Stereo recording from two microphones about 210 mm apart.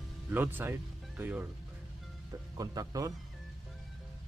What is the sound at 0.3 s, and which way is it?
Speech, 10° right (ahead or behind).